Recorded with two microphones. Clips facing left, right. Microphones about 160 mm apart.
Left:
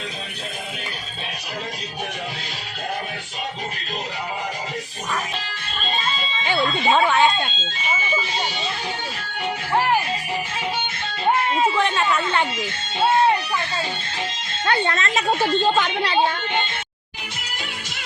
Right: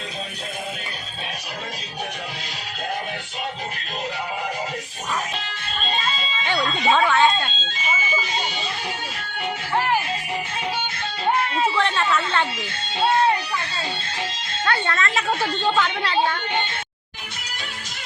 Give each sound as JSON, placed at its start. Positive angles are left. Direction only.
{"t": 6.9, "sound": "a sound", "side_deg": 15}
{"t": 11.5, "sound": "speech", "side_deg": 15}
{"t": 14.6, "sound": "a woman's voice", "side_deg": 20}